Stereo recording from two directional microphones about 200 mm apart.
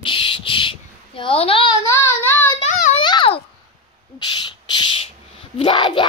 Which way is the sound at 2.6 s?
35° left (ahead or behind).